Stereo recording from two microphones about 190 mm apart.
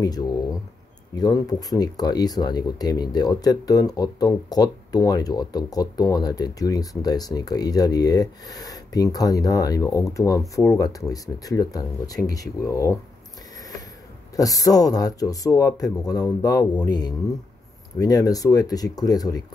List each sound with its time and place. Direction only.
0.0 s a sound: 20° left (ahead or behind)
1.1 s speech: 20° left (ahead or behind)
14.3 s speech: 20° left (ahead or behind)